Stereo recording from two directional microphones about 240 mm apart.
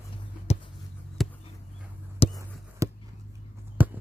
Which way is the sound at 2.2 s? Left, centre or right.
Left.